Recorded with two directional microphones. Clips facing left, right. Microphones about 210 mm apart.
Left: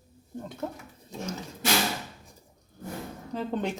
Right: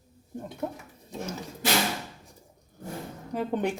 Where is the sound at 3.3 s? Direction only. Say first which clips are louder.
Right 2 dB; 15° right (ahead or behind).